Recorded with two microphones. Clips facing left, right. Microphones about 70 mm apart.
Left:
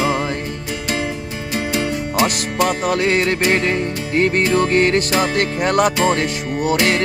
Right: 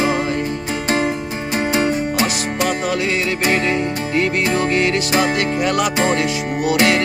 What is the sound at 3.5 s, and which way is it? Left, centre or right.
Music, left.